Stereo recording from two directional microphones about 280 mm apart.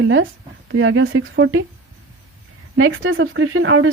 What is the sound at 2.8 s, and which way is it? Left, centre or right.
Speech, right.